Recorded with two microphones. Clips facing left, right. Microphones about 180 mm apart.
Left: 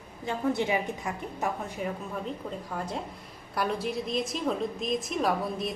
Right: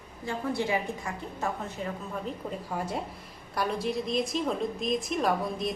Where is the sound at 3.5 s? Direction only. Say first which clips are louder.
Even; centre (ahead or behind).